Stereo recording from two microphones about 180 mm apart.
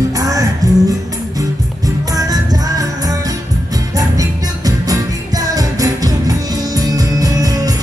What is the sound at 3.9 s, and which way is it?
Music, 20° right (ahead or behind).